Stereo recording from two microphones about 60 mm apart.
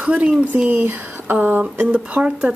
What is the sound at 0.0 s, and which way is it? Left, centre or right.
Speech, centre.